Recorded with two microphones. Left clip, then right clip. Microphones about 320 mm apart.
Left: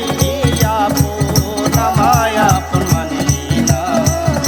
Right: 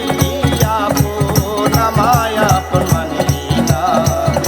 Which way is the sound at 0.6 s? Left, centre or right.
Centre.